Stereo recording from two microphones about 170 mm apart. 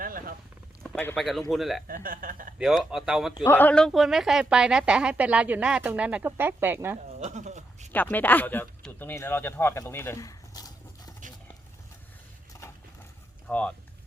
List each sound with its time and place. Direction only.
0.0 s a sound: 55° right (ahead or behind)
0.8 s a sound: 5° left (ahead or behind)
1.2 s a woman's voice: centre (ahead or behind)
1.9 s speech: 55° right (ahead or behind)
2.6 s a woman's voice: 5° right (ahead or behind)
3.4 s a woman's voice: 10° left (ahead or behind); by 6.9 s 15° right (ahead or behind)
7.2 s speech: 45° right (ahead or behind)
7.9 s speech: 10° left (ahead or behind)
13.5 s speech: 10° left (ahead or behind)